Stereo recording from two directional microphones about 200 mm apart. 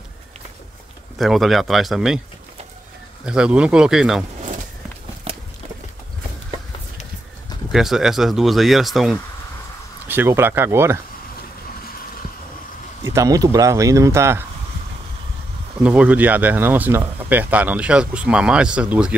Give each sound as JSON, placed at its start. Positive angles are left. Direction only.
{"t": 1.1, "sound": "speech", "side_deg": 0}
{"t": 3.3, "sound": "speech", "side_deg": -5}
{"t": 5.3, "sound": "walk", "side_deg": -30}
{"t": 7.7, "sound": "speech", "side_deg": 0}
{"t": 10.0, "sound": "speech", "side_deg": -10}
{"t": 13.0, "sound": "speech", "side_deg": -15}
{"t": 15.8, "sound": "speech", "side_deg": -5}